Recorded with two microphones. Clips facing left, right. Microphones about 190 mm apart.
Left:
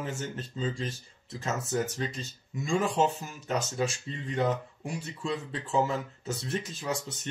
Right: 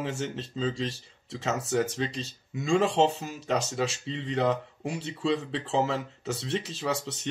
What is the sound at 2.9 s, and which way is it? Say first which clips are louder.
Speech: right 3 dB; 30° right (ahead or behind).